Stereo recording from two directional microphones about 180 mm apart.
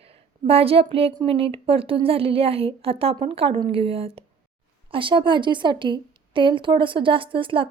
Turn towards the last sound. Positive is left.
turn(degrees=-30)  # may be behind; listen again after turning